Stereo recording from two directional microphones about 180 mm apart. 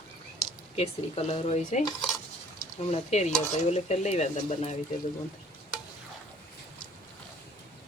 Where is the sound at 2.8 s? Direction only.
40° left (ahead or behind).